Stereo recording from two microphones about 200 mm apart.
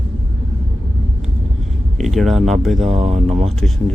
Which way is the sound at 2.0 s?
Centre (ahead or behind).